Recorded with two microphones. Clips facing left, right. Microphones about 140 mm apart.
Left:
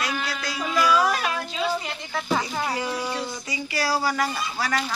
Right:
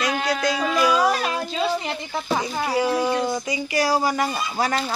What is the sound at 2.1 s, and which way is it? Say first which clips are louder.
Speech: even; 15° right (ahead or behind).